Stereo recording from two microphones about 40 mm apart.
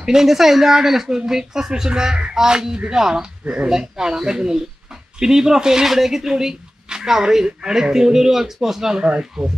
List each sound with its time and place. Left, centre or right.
0.0 s speech: centre